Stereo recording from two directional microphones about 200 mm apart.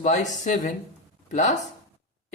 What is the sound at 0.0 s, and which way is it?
Speech, 35° left (ahead or behind).